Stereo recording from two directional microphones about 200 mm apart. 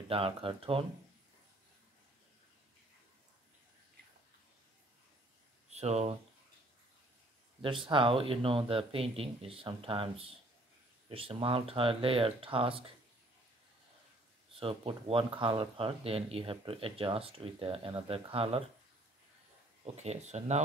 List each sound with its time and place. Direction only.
0.1 s speech: 30° right (ahead or behind)
5.7 s speech: 35° right (ahead or behind)
7.6 s speech: 25° right (ahead or behind)
14.6 s speech: 25° right (ahead or behind)
19.8 s speech: 35° right (ahead or behind)